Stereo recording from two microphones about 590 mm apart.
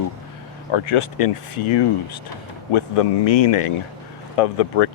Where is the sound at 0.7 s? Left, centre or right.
Left.